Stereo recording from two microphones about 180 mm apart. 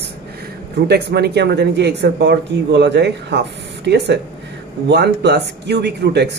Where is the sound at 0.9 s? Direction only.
65° right (ahead or behind).